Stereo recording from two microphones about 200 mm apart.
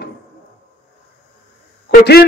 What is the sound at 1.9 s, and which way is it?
Speech, 50° left (ahead or behind).